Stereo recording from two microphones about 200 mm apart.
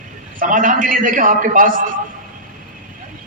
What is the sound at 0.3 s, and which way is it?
A man's voice, 40° right (ahead or behind).